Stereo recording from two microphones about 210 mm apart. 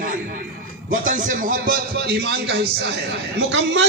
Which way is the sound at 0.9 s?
40° right (ahead or behind).